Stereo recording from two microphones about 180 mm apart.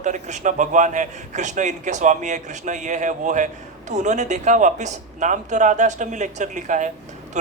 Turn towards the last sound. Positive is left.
turn(degrees=-45)  # may be behind; listen again after turning